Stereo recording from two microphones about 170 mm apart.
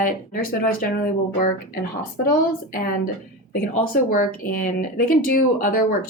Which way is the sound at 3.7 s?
55° left (ahead or behind).